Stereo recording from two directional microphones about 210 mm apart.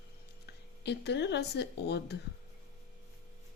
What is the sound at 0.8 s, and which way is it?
A woman's voice, 55° left (ahead or behind).